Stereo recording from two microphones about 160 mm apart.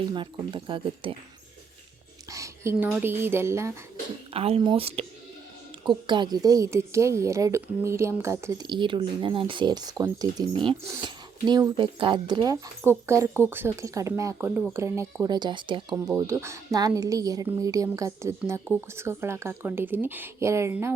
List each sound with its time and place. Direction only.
0.1 s speech: 30° right (ahead or behind)
2.3 s speech: 20° right (ahead or behind)
4.3 s a woman's voice: 35° right (ahead or behind); by 20.9 s 15° right (ahead or behind)